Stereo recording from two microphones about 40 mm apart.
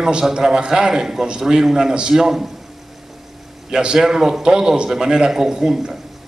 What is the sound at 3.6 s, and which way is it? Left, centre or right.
A man's voice, centre.